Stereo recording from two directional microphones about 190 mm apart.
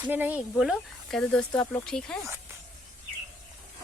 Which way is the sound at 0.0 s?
10° right (ahead or behind).